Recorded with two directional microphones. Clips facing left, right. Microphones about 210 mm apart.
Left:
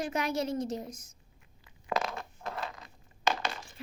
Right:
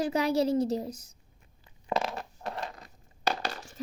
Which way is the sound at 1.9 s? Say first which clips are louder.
Right 2 dB; 30° right (ahead or behind).